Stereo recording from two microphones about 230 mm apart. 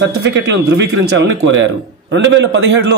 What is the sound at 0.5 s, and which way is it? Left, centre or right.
A man's voice, right.